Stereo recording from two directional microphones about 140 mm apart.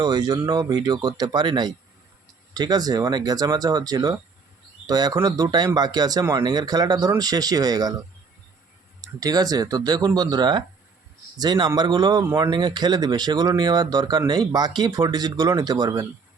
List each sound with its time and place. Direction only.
0.0 s speech: 30° right (ahead or behind)
9.2 s speech: 25° right (ahead or behind)